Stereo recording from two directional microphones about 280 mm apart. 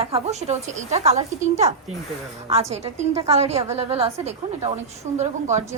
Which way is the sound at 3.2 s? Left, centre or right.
Right.